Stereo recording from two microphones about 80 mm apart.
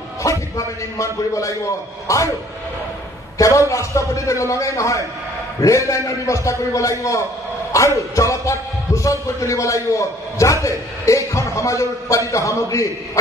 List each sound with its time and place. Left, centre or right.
0.2 s speech: left
3.3 s speech: left